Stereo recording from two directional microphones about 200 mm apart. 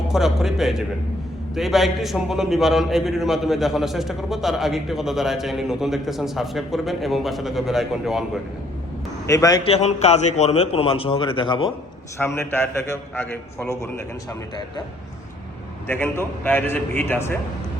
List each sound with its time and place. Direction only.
0.1 s a man's voice: centre (ahead or behind)
9.2 s a man's voice: 15° left (ahead or behind)
9.6 s a man's voice: 35° left (ahead or behind)
12.1 s a man's voice: 10° left (ahead or behind)
15.9 s a man's voice: 10° left (ahead or behind)